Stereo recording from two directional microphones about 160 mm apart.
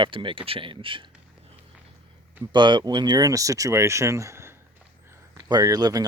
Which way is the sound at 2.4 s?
30° right (ahead or behind).